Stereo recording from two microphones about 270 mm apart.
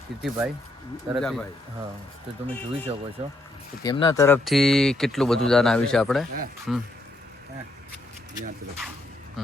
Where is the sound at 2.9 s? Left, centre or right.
Right.